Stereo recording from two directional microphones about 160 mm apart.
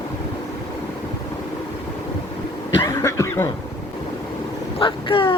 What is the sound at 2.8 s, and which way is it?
Speech, 15° left (ahead or behind).